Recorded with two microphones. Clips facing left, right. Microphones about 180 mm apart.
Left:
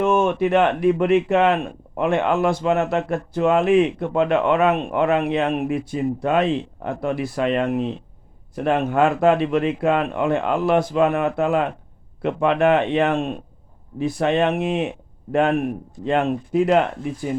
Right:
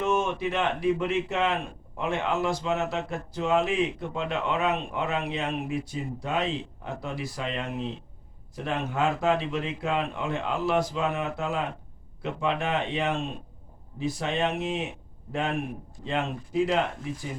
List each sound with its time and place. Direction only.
0.0 s speech: 55° left (ahead or behind)